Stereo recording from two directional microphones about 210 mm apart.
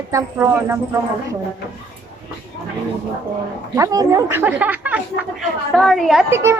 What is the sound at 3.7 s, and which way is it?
A woman's voice, 15° right (ahead or behind).